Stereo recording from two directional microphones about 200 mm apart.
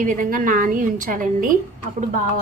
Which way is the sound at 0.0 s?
40° right (ahead or behind).